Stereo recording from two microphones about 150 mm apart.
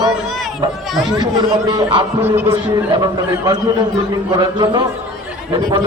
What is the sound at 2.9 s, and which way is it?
A man's voice, 25° right (ahead or behind).